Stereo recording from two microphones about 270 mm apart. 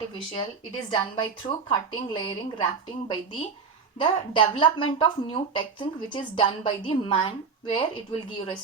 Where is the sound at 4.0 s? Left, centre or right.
Centre.